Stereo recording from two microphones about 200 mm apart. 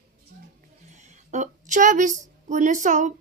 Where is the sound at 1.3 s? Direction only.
35° right (ahead or behind).